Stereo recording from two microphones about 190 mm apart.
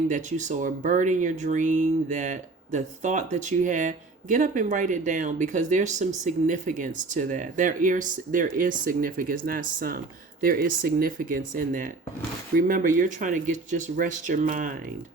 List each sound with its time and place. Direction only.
0.1 s speech: 40° right (ahead or behind)